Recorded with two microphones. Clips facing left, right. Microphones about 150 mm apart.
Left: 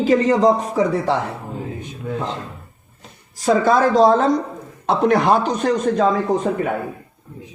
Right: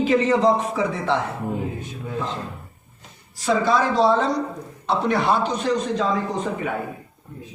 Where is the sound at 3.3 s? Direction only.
45° left (ahead or behind).